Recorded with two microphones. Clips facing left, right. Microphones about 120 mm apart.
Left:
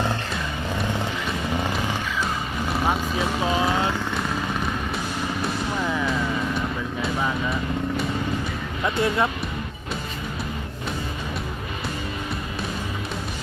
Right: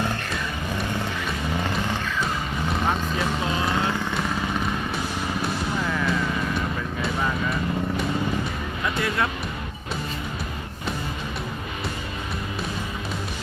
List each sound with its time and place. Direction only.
2.8 s vehicle: 5° left (ahead or behind)
5.8 s vehicle: 10° left (ahead or behind)
7.0 s a sound: 5° left (ahead or behind)
9.0 s speech: 20° left (ahead or behind)